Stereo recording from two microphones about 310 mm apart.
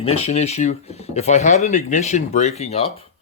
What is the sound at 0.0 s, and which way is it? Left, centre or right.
Speech, centre.